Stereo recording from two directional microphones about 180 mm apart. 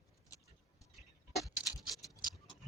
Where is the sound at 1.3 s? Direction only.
Centre (ahead or behind).